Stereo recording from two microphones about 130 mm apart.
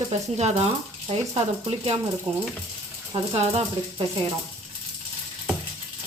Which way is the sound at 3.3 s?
50° right (ahead or behind).